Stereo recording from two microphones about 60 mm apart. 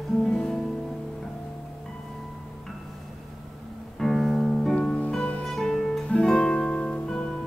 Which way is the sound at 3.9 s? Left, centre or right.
Centre.